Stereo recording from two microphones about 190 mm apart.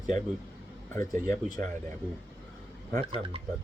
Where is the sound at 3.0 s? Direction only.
30° right (ahead or behind).